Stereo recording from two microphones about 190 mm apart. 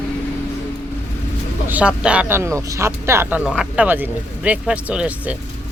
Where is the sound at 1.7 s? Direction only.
5° right (ahead or behind).